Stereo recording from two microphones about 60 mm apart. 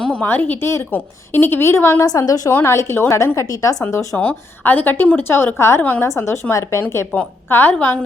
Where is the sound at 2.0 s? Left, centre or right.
Left.